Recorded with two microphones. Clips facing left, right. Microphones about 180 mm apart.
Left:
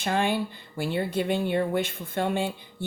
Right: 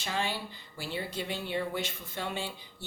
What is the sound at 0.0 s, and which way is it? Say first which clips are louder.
Speech: left 8 dB; 55° left (ahead or behind).